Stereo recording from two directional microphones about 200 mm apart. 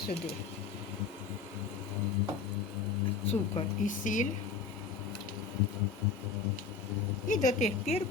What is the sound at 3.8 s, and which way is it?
Speech, 40° left (ahead or behind).